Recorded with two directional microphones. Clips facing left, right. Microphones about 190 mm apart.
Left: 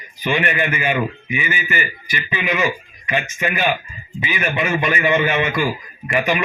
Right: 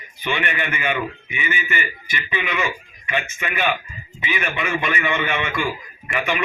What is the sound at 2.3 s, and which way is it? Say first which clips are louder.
Speech: left 4 dB; 35° left (ahead or behind).